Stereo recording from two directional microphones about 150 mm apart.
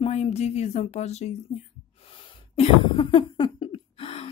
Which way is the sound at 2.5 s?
35° left (ahead or behind).